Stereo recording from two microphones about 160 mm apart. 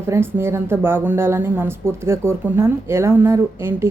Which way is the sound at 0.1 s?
15° right (ahead or behind).